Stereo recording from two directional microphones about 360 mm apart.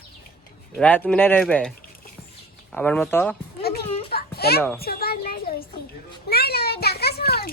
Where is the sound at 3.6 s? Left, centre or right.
Left.